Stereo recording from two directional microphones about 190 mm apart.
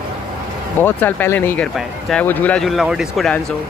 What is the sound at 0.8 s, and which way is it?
Speech, 10° left (ahead or behind).